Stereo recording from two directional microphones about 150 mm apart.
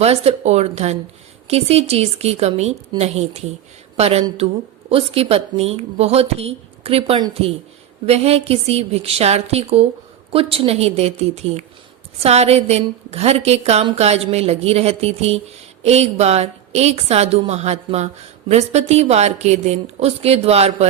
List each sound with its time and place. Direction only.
0.0 s a woman's voice: 45° right (ahead or behind)